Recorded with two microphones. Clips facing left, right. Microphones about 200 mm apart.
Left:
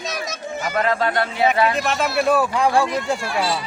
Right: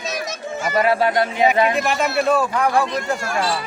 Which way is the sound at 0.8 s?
10° right (ahead or behind).